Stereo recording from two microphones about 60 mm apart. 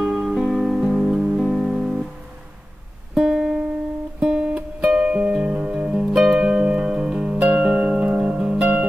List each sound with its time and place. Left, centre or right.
0.0 s music: centre
3.2 s music: centre